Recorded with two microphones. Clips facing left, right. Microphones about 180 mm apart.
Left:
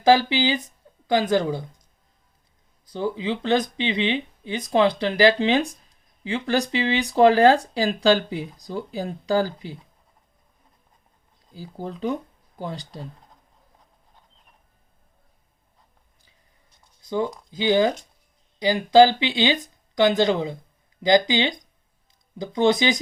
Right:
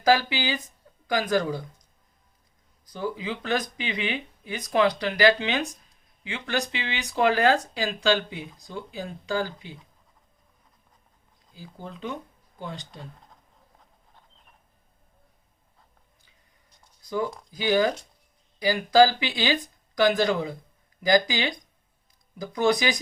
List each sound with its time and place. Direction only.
0.0 s speech: 25° left (ahead or behind)
2.8 s speech: 25° left (ahead or behind)
11.5 s speech: 35° left (ahead or behind)
17.0 s speech: 25° left (ahead or behind)